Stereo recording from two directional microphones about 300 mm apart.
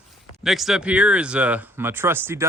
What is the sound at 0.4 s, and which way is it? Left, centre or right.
Speech, centre.